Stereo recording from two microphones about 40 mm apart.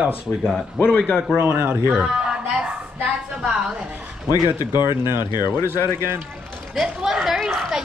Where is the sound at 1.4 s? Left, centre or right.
Right.